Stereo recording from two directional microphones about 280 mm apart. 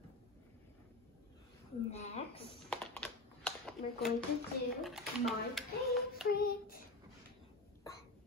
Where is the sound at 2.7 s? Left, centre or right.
Centre.